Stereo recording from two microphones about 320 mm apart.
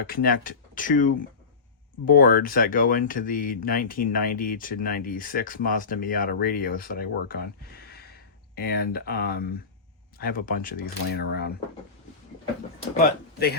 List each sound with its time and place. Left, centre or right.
0.1 s speech: left
8.5 s speech: left
13.0 s speech: left